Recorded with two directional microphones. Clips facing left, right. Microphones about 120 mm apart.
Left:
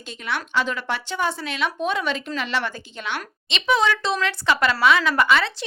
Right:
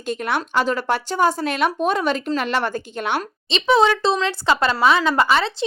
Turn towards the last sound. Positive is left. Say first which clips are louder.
# right 2 dB
turn(degrees=-30)  # may be behind; listen again after turning